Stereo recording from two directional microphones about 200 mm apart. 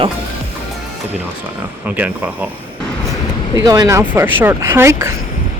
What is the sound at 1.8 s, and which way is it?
Speech, 10° right (ahead or behind).